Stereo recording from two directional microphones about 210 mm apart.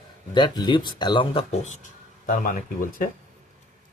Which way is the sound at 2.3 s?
40° left (ahead or behind).